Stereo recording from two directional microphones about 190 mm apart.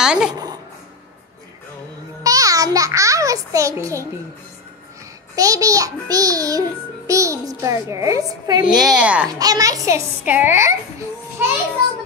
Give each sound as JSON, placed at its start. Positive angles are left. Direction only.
{"t": 0.0, "sound": "a sound", "side_deg": -5}
{"t": 0.3, "sound": "a sound", "side_deg": -20}
{"t": 2.2, "sound": "music", "side_deg": -20}
{"t": 5.3, "sound": "a child's voice", "side_deg": -20}
{"t": 8.6, "sound": "a woman's voice", "side_deg": 0}
{"t": 9.3, "sound": "a child's voice", "side_deg": -20}